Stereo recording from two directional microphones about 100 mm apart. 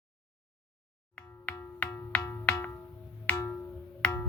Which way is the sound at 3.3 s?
15° left (ahead or behind).